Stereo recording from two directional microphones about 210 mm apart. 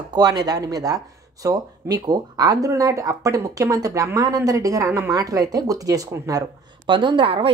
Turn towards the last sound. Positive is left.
turn(degrees=-25)  # may be behind; listen again after turning